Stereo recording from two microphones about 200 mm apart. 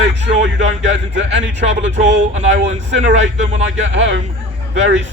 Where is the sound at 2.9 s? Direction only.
65° right (ahead or behind).